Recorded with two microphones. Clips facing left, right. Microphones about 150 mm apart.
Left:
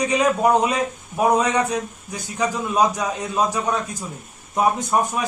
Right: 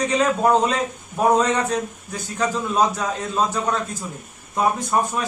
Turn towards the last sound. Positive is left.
turn(degrees=15)  # may be behind; listen again after turning